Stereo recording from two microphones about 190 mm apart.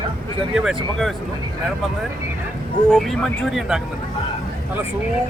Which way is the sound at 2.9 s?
Centre (ahead or behind).